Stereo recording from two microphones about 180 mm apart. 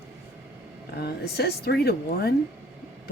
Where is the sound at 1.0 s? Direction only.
65° left (ahead or behind).